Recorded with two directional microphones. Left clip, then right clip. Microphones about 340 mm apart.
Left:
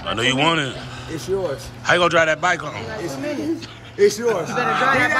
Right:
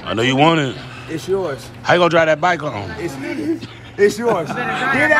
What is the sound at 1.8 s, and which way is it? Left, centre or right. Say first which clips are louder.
A man's voice: right 3 dB; centre.